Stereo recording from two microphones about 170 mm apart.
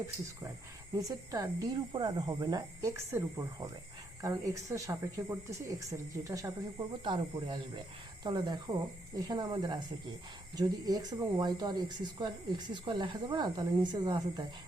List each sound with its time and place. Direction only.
1.0 s speech: 20° right (ahead or behind)